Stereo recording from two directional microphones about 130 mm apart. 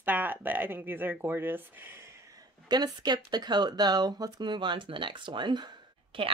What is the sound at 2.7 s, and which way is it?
Speech, 30° right (ahead or behind).